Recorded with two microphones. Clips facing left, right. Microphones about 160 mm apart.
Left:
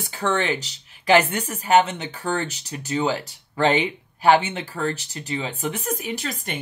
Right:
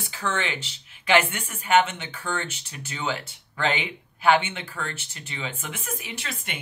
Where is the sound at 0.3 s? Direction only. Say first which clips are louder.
Left 6 dB; 40° left (ahead or behind).